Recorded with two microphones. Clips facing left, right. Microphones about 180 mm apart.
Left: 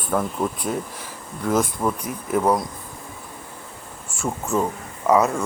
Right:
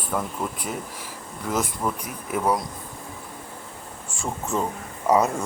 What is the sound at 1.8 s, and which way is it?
Speech, 20° left (ahead or behind).